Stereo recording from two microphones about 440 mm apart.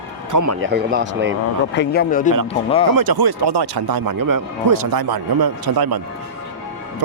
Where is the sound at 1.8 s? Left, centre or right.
Centre.